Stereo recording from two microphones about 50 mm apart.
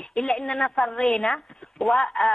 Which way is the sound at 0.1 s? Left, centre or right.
Centre.